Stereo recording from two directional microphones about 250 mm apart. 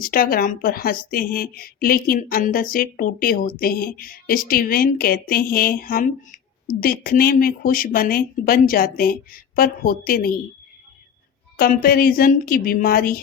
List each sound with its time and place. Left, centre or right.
0.0 s a woman's voice: left
11.5 s a woman's voice: left